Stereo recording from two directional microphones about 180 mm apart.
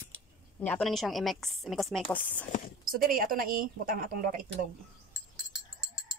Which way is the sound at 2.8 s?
50° right (ahead or behind).